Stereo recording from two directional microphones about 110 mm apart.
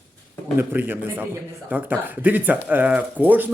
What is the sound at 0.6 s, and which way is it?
Speech, 15° right (ahead or behind).